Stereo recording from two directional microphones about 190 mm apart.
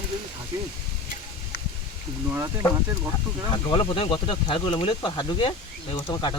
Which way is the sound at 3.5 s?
25° left (ahead or behind).